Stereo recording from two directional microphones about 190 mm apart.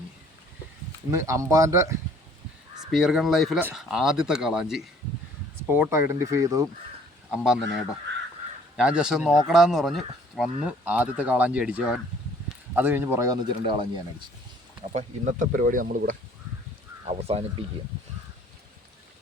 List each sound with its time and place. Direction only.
1.1 s a man's voice: 15° right (ahead or behind)
2.9 s a man's voice: centre (ahead or behind); by 6.7 s 15° right (ahead or behind)
7.3 s speech: 5° right (ahead or behind)
8.7 s a man's voice: 5° right (ahead or behind); by 14.0 s 25° right (ahead or behind)
14.9 s speech: 40° right (ahead or behind)
17.1 s speech: 35° right (ahead or behind)